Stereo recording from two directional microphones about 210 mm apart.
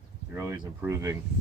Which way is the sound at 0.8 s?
15° right (ahead or behind).